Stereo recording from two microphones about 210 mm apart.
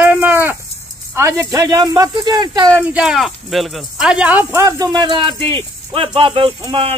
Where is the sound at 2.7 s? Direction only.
5° right (ahead or behind); by 6.9 s 25° right (ahead or behind).